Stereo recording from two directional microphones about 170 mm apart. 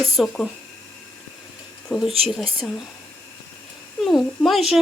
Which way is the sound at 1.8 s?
5° left (ahead or behind).